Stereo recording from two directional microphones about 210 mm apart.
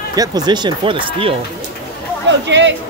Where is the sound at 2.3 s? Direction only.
60° right (ahead or behind).